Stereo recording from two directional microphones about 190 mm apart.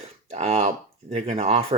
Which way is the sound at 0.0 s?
35° right (ahead or behind).